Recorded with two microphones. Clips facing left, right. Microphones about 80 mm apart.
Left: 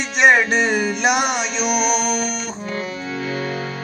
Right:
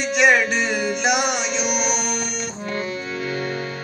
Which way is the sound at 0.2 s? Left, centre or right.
Left.